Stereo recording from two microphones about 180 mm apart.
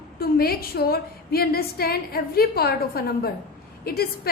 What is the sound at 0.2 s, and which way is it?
A woman's voice, 55° left (ahead or behind).